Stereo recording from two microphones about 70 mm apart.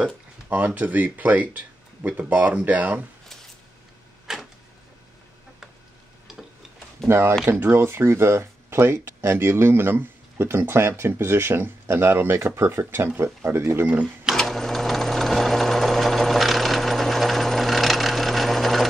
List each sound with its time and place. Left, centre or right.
0.0 s speech: right
4.3 s a sound: centre
7.1 s speech: right
14.3 s sewing machine: centre